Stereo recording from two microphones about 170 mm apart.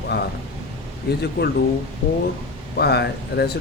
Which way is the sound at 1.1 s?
75° left (ahead or behind).